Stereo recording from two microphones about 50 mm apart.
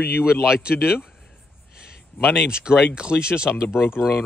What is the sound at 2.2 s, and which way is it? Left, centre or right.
Speech, centre.